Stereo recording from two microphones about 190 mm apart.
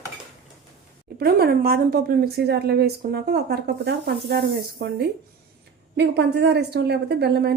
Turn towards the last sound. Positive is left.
turn(degrees=-60)  # may be behind; listen again after turning